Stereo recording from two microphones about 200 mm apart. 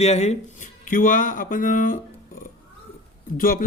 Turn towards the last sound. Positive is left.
turn(degrees=45)  # may be behind; listen again after turning